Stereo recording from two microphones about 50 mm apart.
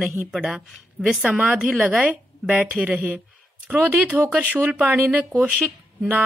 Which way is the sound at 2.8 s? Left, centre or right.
Right.